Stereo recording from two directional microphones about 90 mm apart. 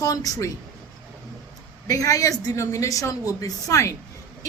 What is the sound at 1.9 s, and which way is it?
A woman's voice, 40° left (ahead or behind).